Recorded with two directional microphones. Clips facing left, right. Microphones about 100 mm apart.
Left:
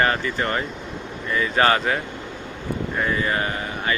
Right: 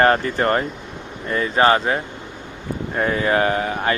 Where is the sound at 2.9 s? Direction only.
45° right (ahead or behind).